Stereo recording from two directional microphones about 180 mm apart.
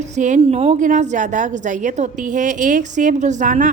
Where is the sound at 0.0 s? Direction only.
40° right (ahead or behind).